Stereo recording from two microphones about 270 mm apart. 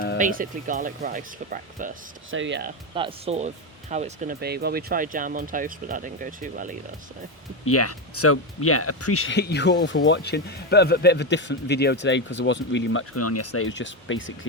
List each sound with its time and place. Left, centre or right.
0.2 s speech: right
2.3 s speech: right
2.9 s speech: centre
7.6 s speech: left